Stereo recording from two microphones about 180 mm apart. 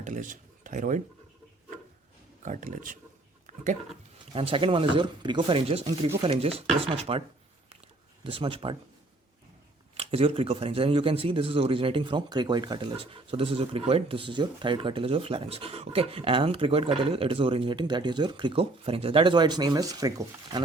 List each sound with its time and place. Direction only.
0.0 s speech: 45° right (ahead or behind)
2.4 s speech: 45° right (ahead or behind)
3.4 s a sound: 45° right (ahead or behind)
4.3 s a man's voice: 30° right (ahead or behind)
8.2 s a man's voice: 30° right (ahead or behind)
9.9 s a man's voice: 35° right (ahead or behind)